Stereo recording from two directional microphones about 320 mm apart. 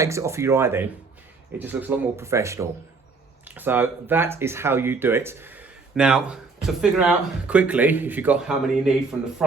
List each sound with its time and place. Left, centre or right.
0.0 s speech: centre